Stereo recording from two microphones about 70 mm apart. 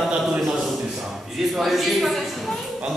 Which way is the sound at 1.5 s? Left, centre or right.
Centre.